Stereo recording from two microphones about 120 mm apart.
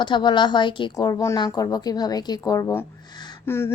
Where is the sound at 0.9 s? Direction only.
25° left (ahead or behind).